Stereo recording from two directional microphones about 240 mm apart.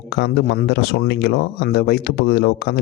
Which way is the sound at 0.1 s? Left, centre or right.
Left.